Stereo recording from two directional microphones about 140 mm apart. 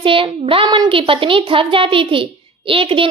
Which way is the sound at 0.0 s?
40° right (ahead or behind).